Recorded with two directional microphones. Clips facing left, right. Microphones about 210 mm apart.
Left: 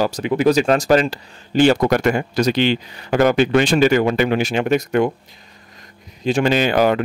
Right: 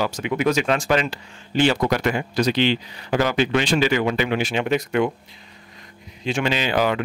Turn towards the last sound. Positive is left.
turn(degrees=50)  # may be behind; listen again after turning